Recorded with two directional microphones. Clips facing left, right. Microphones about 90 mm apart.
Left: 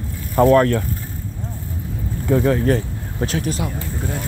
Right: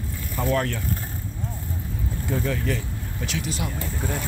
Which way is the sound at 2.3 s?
45° left (ahead or behind).